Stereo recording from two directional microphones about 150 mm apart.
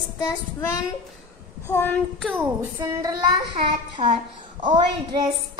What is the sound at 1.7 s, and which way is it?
Speech, 10° left (ahead or behind).